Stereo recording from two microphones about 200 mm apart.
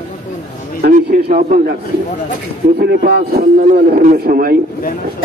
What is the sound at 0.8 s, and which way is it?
Speech, 45° right (ahead or behind).